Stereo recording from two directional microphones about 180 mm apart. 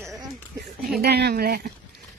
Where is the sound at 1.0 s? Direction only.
65° right (ahead or behind).